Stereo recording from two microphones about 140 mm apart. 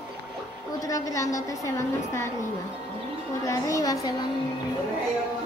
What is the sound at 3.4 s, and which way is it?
Speech, 25° left (ahead or behind).